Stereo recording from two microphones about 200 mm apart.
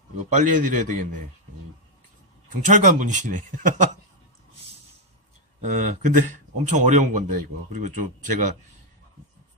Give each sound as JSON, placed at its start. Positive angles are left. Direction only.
{"t": 0.2, "sound": "speech", "side_deg": -40}
{"t": 2.5, "sound": "speech", "side_deg": -40}
{"t": 5.6, "sound": "speech", "side_deg": -40}